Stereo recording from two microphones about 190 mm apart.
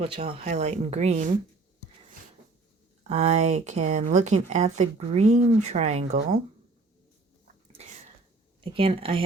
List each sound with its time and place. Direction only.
0.0 s speech: 35° right (ahead or behind)
3.1 s speech: 35° right (ahead or behind)
7.8 s sneeze: 35° right (ahead or behind)
8.6 s speech: 30° right (ahead or behind)